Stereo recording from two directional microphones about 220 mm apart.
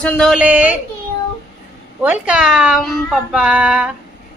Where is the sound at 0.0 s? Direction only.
5° left (ahead or behind).